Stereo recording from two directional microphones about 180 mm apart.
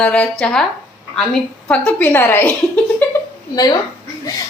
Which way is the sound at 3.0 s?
10° left (ahead or behind).